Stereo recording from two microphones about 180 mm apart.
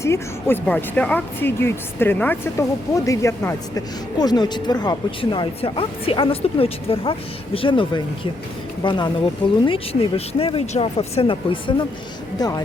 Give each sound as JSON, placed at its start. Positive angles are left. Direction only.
{"t": 0.0, "sound": "speech", "side_deg": 15}